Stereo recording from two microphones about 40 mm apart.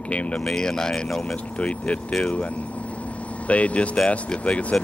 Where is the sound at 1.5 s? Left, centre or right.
Left.